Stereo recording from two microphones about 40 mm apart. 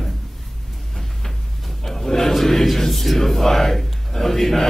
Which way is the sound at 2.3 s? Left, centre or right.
Centre.